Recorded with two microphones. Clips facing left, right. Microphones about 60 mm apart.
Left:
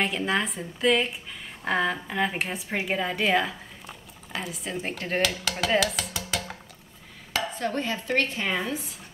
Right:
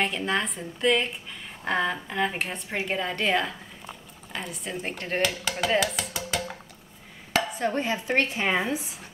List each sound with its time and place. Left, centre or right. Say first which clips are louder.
0.0 s a woman's voice: left 1 dB; centre
7.6 s a woman's voice: right 2 dB; centre